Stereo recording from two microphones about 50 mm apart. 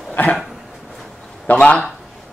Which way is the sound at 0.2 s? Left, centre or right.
Left.